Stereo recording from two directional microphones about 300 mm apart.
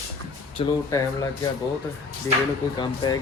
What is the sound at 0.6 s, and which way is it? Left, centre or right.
Speech, centre.